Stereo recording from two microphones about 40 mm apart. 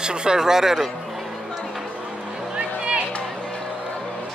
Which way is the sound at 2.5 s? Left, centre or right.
Right.